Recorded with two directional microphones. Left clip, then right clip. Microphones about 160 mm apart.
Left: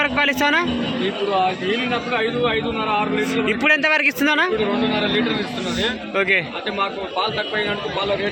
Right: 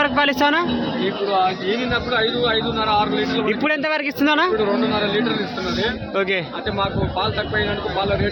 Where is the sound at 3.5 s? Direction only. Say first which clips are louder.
Left 7 dB; 10° right (ahead or behind).